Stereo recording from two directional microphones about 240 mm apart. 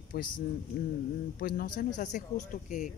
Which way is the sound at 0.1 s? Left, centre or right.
Left.